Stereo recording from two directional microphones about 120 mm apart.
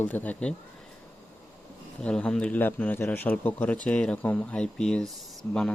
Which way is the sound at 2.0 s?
10° left (ahead or behind).